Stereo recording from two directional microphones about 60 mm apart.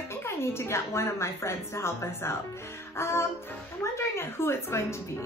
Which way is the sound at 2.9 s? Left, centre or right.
Left.